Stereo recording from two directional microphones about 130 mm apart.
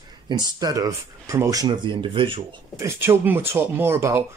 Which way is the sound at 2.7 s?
20° right (ahead or behind).